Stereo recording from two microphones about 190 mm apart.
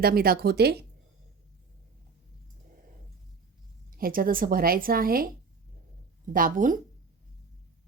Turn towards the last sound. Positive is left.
turn(degrees=-45)  # may be behind; listen again after turning